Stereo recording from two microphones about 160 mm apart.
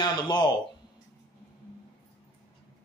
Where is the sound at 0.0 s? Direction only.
25° left (ahead or behind).